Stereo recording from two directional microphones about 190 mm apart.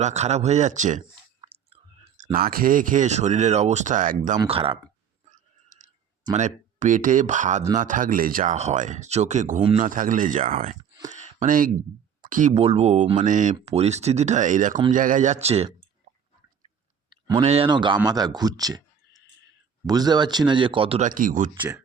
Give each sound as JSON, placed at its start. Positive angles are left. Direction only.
{"t": 0.0, "sound": "speech", "side_deg": -35}
{"t": 1.4, "sound": "a sound", "side_deg": -30}
{"t": 2.3, "sound": "speech", "side_deg": -50}
{"t": 4.4, "sound": "speech", "side_deg": -30}
{"t": 5.3, "sound": "a sound", "side_deg": -40}
{"t": 6.3, "sound": "speech", "side_deg": -40}
{"t": 9.7, "sound": "speech", "side_deg": -45}
{"t": 16.1, "sound": "a sound", "side_deg": -80}
{"t": 17.2, "sound": "speech", "side_deg": -30}
{"t": 21.1, "sound": "speech", "side_deg": -45}